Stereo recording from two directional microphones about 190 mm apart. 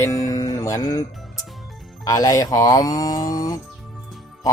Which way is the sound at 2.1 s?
15° left (ahead or behind).